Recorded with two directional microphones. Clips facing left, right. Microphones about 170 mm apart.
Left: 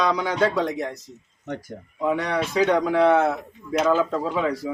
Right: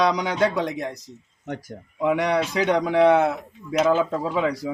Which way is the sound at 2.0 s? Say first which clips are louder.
Right 2 dB; 15° right (ahead or behind).